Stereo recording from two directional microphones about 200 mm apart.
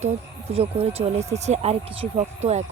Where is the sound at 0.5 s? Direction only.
30° right (ahead or behind).